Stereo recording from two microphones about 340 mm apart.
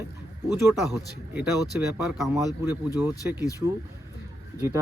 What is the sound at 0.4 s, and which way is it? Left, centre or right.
A man's voice, centre.